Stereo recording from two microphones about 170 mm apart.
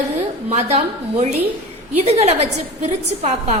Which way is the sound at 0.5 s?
40° right (ahead or behind).